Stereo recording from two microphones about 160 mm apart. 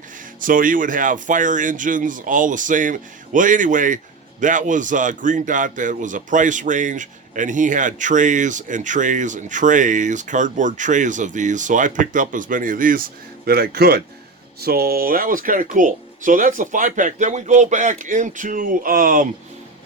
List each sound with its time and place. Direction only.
0.3 s speech: 60° right (ahead or behind)